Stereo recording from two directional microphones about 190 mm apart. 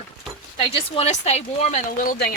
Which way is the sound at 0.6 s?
30° left (ahead or behind).